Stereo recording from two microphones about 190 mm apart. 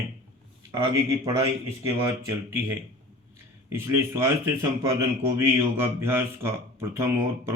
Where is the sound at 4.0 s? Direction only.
15° right (ahead or behind).